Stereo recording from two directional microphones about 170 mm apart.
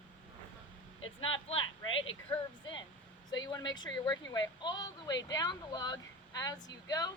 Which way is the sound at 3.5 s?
25° left (ahead or behind).